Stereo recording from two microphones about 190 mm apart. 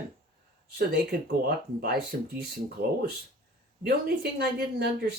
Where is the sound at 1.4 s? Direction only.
55° right (ahead or behind).